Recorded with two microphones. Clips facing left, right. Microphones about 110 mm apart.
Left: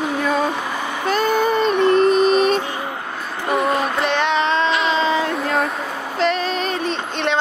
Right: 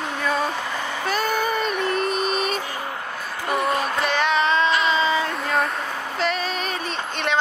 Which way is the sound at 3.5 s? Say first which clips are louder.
Left 4 dB; 40° left (ahead or behind).